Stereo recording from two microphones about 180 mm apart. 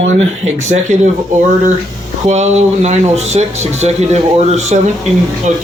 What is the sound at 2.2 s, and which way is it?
Speech, 40° right (ahead or behind).